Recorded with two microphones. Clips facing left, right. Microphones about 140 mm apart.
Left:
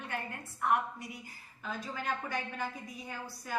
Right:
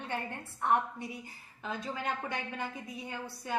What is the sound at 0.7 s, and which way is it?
A woman's voice, 30° right (ahead or behind).